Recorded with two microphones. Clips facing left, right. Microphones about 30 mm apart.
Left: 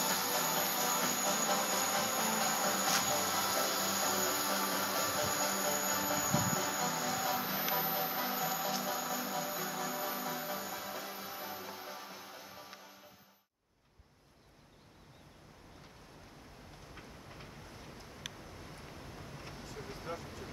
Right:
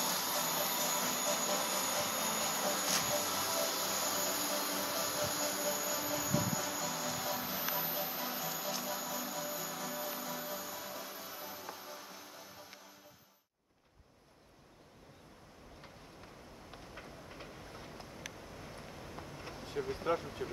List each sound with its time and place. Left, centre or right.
0.2 s vehicle: centre
5.3 s a sound: centre
6.3 s music: centre
16.9 s train: centre
19.3 s vehicle: centre
20.1 s speech: right